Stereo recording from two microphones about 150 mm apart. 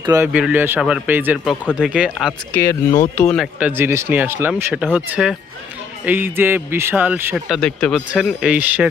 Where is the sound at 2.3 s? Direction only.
15° left (ahead or behind).